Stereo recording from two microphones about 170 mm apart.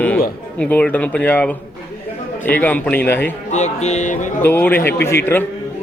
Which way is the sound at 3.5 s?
40° left (ahead or behind).